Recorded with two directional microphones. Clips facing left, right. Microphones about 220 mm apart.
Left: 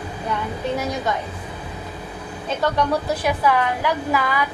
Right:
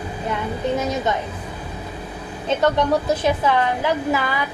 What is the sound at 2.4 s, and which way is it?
A woman's voice, 20° right (ahead or behind).